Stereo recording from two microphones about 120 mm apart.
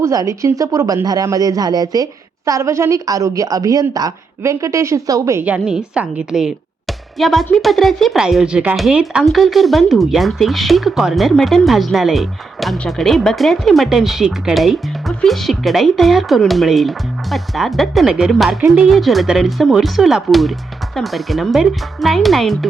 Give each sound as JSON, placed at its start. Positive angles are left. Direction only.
{"t": 0.0, "sound": "speech", "side_deg": -25}
{"t": 5.5, "sound": "speech", "side_deg": -5}